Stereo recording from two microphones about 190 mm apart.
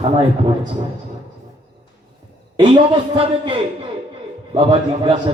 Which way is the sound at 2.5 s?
20° right (ahead or behind).